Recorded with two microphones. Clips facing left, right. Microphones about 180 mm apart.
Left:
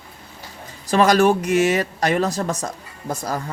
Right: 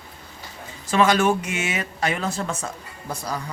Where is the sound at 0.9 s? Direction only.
40° left (ahead or behind).